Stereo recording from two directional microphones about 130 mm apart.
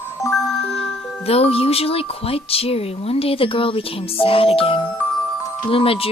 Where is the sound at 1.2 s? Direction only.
50° left (ahead or behind).